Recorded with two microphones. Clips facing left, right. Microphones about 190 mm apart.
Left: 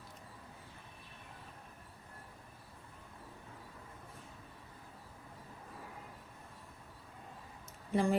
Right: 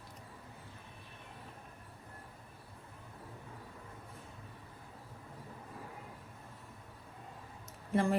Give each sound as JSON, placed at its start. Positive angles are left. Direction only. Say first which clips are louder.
{"t": 7.9, "sound": "speech", "louder": "right 1 dB", "side_deg": 0}